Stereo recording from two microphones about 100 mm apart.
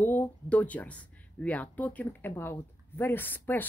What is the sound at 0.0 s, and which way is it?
Speech, 20° left (ahead or behind).